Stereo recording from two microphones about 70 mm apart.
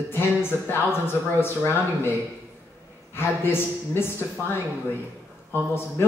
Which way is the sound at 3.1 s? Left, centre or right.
Left.